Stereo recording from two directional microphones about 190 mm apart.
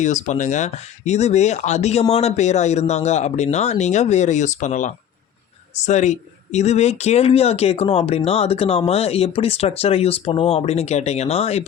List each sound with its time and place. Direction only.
0.0 s speech: 40° left (ahead or behind)